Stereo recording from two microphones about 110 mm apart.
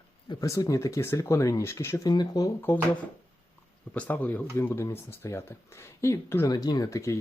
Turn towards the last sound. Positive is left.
turn(degrees=30)  # may be behind; listen again after turning